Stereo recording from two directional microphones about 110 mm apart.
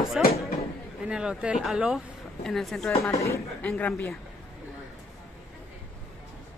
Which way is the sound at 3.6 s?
15° left (ahead or behind).